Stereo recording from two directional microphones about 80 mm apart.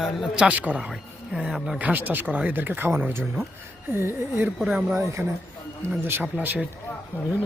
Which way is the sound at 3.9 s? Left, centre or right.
Right.